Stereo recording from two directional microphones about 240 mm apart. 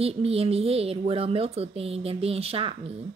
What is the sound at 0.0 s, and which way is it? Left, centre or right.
A woman's voice, right.